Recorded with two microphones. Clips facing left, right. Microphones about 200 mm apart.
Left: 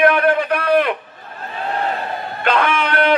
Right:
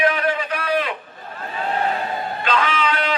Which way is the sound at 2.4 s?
55° left (ahead or behind).